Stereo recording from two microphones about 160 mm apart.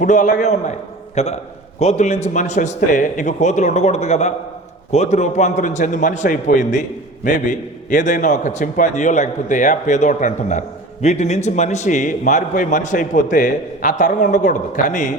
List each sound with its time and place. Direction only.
0.0 s a man's voice: 50° left (ahead or behind)